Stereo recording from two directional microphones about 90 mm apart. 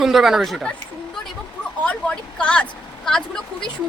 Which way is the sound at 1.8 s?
15° left (ahead or behind).